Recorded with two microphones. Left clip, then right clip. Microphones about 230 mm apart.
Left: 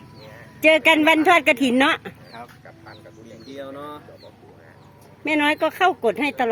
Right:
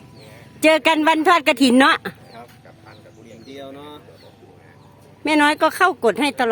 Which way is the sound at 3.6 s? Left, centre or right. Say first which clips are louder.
Left 3 dB; centre.